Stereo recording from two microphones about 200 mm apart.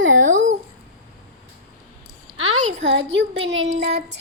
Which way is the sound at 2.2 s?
90° right.